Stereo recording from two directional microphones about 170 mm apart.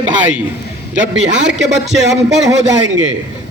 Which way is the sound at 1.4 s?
90° right.